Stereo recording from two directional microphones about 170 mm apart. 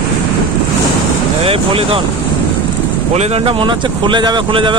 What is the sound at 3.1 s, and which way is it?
Speech, 35° right (ahead or behind).